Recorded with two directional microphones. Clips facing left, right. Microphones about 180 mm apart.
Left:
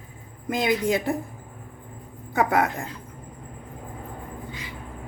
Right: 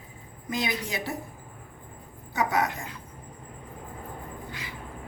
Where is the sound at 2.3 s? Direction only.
55° left (ahead or behind).